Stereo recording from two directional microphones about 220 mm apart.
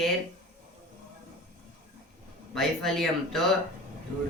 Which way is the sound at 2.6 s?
Centre (ahead or behind).